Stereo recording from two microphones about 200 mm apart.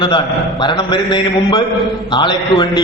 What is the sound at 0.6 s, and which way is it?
A man's voice, 20° left (ahead or behind).